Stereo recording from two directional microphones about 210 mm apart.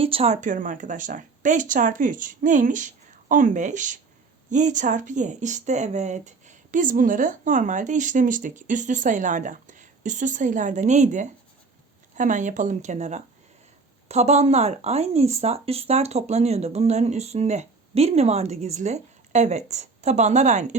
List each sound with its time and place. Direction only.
0.0 s speech: 30° right (ahead or behind)